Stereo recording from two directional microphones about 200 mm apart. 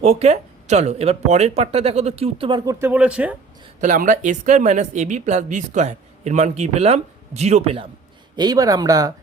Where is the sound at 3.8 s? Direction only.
40° right (ahead or behind).